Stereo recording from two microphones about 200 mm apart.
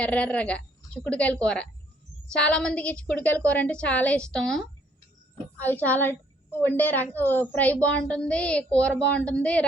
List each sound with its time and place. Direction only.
0.0 s a woman's voice: 5° left (ahead or behind)